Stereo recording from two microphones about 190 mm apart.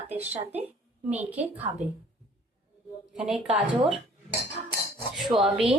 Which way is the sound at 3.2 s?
5° right (ahead or behind).